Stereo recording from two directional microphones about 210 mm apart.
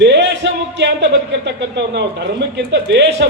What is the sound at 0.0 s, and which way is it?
Music, 55° right (ahead or behind).